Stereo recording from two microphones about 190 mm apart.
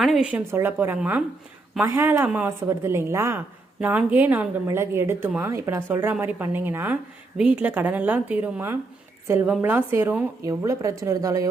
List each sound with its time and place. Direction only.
0.0 s a woman's voice: 5° right (ahead or behind)